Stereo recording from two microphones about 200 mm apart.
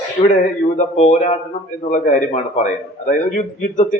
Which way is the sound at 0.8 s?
35° left (ahead or behind).